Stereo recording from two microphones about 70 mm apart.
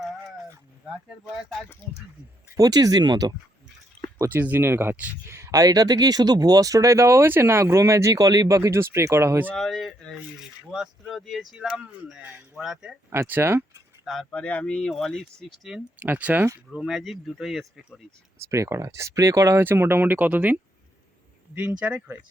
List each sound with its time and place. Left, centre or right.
2.6 s speech: right
4.3 s speech: right
5.3 s speech: right
9.6 s speech: centre
13.1 s speech: right
14.0 s speech: centre
14.3 s speech: centre
14.8 s speech: centre
16.0 s speech: right
16.7 s speech: centre
18.4 s speech: right
19.5 s speech: right; by 22.1 s centre